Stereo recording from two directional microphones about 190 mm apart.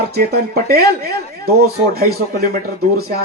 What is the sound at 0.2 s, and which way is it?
Speech, 55° right (ahead or behind).